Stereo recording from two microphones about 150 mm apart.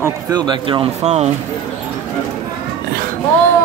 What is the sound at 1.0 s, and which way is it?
Speech, 45° right (ahead or behind).